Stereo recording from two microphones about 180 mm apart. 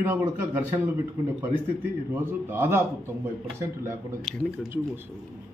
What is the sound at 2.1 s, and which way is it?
Speech, 10° right (ahead or behind).